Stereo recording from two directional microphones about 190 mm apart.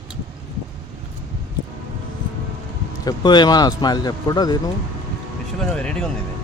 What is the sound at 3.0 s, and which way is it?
Speech, 20° left (ahead or behind).